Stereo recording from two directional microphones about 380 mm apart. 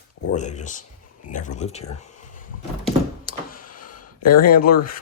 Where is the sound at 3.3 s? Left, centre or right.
Left.